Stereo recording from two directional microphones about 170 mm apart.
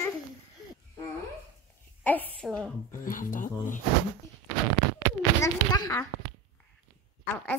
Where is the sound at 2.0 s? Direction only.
10° left (ahead or behind).